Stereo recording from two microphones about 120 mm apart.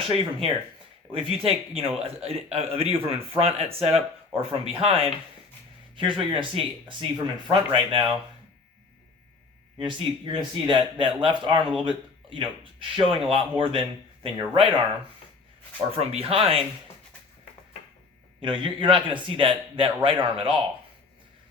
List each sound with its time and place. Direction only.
0.0 s a man's voice: 50° right (ahead or behind)
9.7 s a man's voice: 45° right (ahead or behind)
15.9 s a man's voice: 55° right (ahead or behind)
18.3 s a man's voice: 45° right (ahead or behind)